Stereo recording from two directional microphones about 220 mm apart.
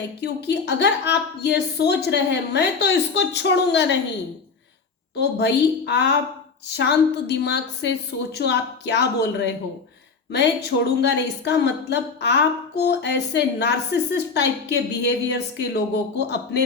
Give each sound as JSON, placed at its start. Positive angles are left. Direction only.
{"t": 0.2, "sound": "a woman's voice", "side_deg": 50}
{"t": 5.1, "sound": "a woman's voice", "side_deg": 50}